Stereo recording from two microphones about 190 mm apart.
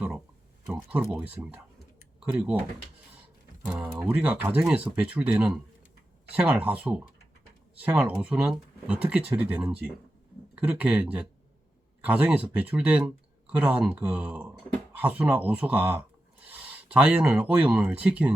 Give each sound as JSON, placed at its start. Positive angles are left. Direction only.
{"t": 0.7, "sound": "speech", "side_deg": -5}
{"t": 3.6, "sound": "speech", "side_deg": -5}